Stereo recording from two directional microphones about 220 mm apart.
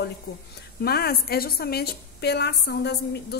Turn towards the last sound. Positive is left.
turn(degrees=50)  # may be behind; listen again after turning